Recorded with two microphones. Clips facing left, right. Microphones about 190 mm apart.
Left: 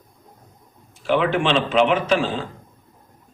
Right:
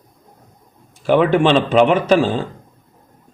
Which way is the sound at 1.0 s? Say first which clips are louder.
Right 6 dB; 45° right (ahead or behind).